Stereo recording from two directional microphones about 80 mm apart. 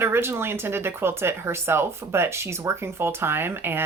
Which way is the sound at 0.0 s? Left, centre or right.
Right.